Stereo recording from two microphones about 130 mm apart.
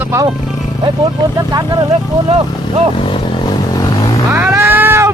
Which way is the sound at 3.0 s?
40° left (ahead or behind).